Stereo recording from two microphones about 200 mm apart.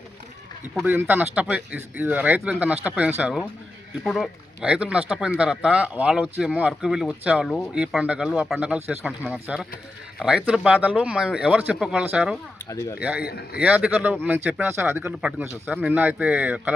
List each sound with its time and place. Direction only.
0.9 s speech: 10° right (ahead or behind)
12.6 s speech: 15° left (ahead or behind)
13.0 s speech: 5° right (ahead or behind)
13.2 s a man's voice: 50° left (ahead or behind)
13.6 s speech: 5° right (ahead or behind)